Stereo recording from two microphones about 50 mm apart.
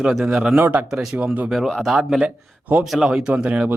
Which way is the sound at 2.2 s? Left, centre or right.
Right.